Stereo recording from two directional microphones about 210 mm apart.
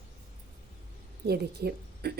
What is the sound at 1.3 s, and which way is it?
Speech, 50° right (ahead or behind).